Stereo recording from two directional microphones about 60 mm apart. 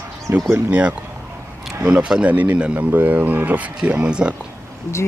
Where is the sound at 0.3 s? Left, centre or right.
Right.